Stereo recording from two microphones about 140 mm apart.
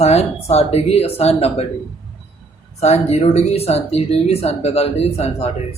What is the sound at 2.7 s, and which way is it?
A man's voice, 50° left (ahead or behind).